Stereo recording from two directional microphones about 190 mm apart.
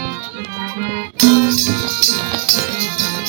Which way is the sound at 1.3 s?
45° right (ahead or behind).